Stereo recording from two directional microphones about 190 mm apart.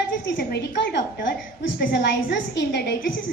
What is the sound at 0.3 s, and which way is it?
Speech, 60° left (ahead or behind).